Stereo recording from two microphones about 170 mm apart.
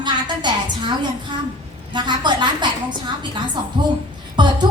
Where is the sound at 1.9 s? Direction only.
25° right (ahead or behind).